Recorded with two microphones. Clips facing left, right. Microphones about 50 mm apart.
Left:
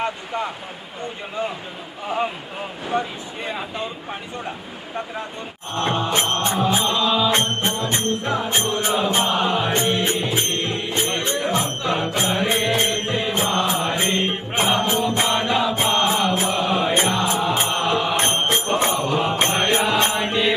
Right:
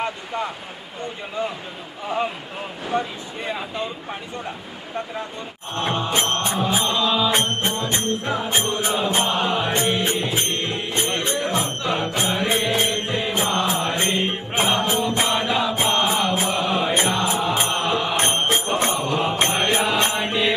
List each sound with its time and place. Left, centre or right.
0.0 s a sound: centre
2.0 s music: centre
5.7 s music: centre
18.5 s mantra: centre